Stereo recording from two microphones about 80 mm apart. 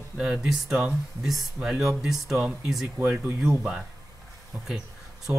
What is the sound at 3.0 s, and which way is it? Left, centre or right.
Speech, centre.